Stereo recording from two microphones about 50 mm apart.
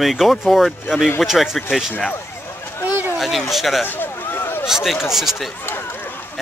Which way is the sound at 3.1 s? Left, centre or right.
Centre.